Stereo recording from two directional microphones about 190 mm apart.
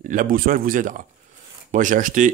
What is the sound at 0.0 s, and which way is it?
Speech, 45° right (ahead or behind).